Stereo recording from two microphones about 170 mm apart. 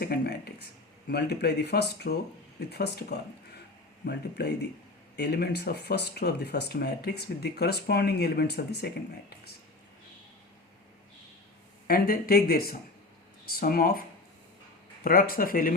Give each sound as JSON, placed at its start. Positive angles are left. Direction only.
{"t": 0.0, "sound": "speech", "side_deg": 65}
{"t": 11.9, "sound": "speech", "side_deg": 60}
{"t": 15.0, "sound": "speech", "side_deg": 55}